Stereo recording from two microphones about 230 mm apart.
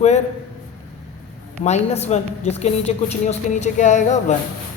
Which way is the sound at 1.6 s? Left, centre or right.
Left.